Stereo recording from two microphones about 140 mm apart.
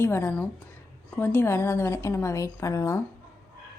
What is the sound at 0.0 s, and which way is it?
A woman's voice, 15° left (ahead or behind).